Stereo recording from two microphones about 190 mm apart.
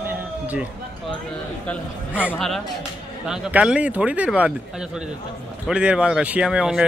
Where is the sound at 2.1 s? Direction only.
5° right (ahead or behind).